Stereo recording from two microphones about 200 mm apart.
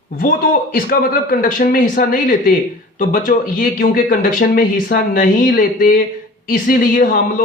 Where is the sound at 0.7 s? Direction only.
45° left (ahead or behind).